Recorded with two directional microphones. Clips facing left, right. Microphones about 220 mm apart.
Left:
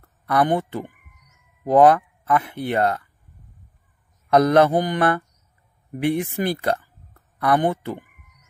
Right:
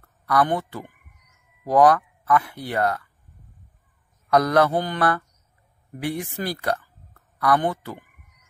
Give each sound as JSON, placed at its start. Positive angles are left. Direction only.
{"t": 0.3, "sound": "mantra", "side_deg": 20}
{"t": 1.6, "sound": "speech", "side_deg": 25}
{"t": 4.3, "sound": "mantra", "side_deg": 25}
{"t": 6.0, "sound": "speech", "side_deg": 20}